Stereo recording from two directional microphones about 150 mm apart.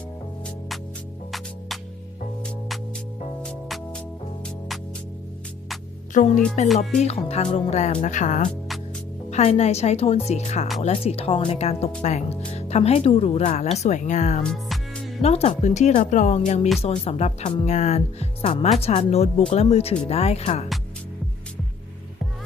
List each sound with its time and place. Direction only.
3.4 s music: 5° left (ahead or behind)
6.1 s speech: 55° left (ahead or behind)
7.0 s speech: 45° left (ahead or behind)
14.4 s music: 5° left (ahead or behind)
15.2 s speech: 45° left (ahead or behind)
16.8 s speech: 45° left (ahead or behind)